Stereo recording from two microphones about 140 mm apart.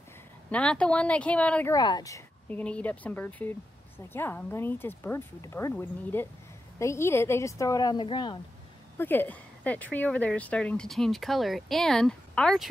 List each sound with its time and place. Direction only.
0.5 s speech: 10° left (ahead or behind)
1.7 s a woman's voice: 30° left (ahead or behind)
2.5 s a woman's voice: 10° left (ahead or behind); by 8.4 s 35° left (ahead or behind)
8.9 s speech: 15° left (ahead or behind)